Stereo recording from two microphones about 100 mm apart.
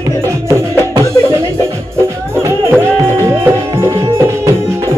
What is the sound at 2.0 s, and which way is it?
Music, 25° right (ahead or behind).